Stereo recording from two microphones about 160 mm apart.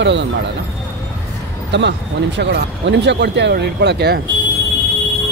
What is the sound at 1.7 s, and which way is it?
Speech, 90° right.